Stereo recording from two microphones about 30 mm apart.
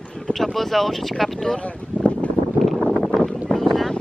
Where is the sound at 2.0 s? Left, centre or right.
Left.